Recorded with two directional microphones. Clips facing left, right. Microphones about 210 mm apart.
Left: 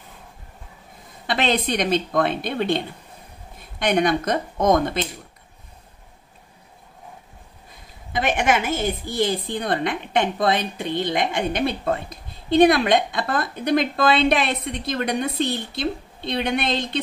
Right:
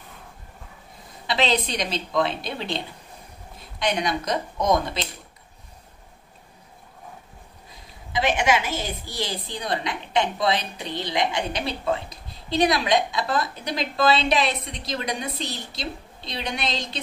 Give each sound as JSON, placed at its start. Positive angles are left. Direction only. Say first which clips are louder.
{"t": 1.2, "sound": "a woman's voice", "louder": "left 2 dB", "side_deg": 55}
{"t": 8.1, "sound": "a woman's voice", "louder": "left 1 dB", "side_deg": 50}